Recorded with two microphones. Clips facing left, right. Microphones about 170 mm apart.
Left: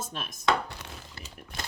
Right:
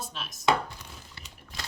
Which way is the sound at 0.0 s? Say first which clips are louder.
Left 2 dB; 50° left (ahead or behind).